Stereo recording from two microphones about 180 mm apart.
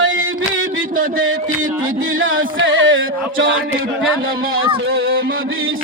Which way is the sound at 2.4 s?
90° right.